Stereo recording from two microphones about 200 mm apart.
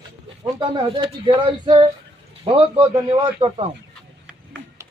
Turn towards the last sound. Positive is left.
turn(degrees=-25)  # may be behind; listen again after turning